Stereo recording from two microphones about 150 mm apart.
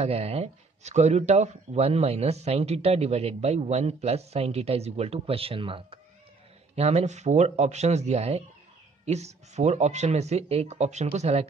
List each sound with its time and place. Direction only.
0.0 s speech: 40° right (ahead or behind)